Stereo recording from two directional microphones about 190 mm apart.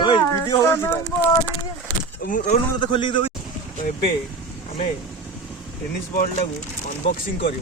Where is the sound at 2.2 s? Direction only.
50° left (ahead or behind).